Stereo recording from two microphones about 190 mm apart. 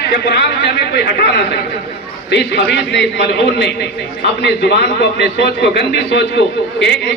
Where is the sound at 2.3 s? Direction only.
60° left (ahead or behind).